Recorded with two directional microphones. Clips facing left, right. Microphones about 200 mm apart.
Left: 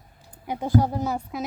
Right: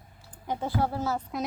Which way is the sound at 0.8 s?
15° left (ahead or behind).